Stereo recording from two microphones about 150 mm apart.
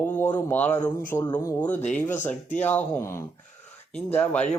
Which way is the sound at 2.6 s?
10° left (ahead or behind).